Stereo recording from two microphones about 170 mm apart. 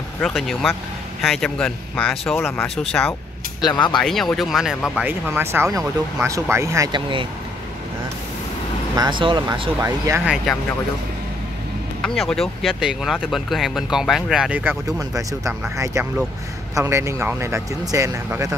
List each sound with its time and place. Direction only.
0.2 s speech: centre (ahead or behind)
3.6 s speech: 25° left (ahead or behind)
4.0 s speech: centre (ahead or behind); by 7.2 s 30° right (ahead or behind)
8.9 s speech: 25° right (ahead or behind)
9.8 s speech: 15° right (ahead or behind)
10.2 s speech: centre (ahead or behind)
12.0 s speech: 5° left (ahead or behind); by 18.5 s 20° right (ahead or behind)